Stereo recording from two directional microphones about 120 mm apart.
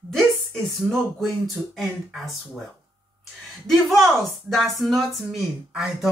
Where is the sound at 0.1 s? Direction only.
Centre (ahead or behind).